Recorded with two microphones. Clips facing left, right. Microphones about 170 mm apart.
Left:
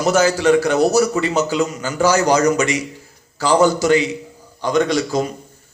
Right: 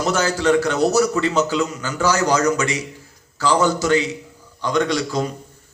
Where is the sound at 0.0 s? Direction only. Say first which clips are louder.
Left 4 dB; 10° left (ahead or behind).